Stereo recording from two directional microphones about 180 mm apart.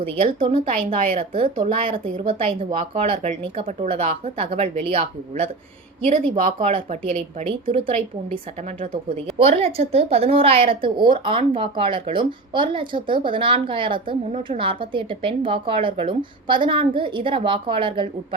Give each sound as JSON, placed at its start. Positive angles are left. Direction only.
{"t": 0.0, "sound": "a woman's voice", "side_deg": -30}
{"t": 6.7, "sound": "speech", "side_deg": -30}
{"t": 9.4, "sound": "a woman's voice", "side_deg": -35}